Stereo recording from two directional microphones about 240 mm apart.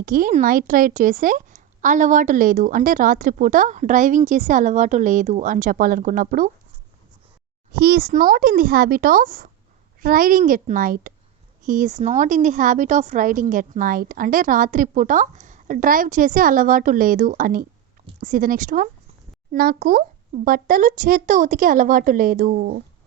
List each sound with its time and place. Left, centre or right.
0.0 s a woman's voice: right
7.7 s a woman's voice: right